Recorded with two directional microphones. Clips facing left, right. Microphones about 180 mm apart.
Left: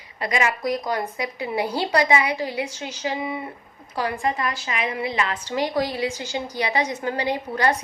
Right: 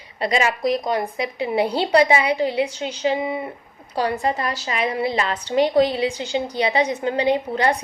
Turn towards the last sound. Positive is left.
turn(degrees=-25)  # may be behind; listen again after turning